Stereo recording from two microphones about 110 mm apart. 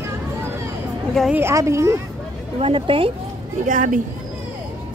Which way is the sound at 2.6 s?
55° right (ahead or behind).